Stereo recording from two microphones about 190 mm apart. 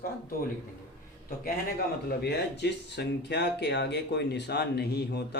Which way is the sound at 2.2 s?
60° left (ahead or behind).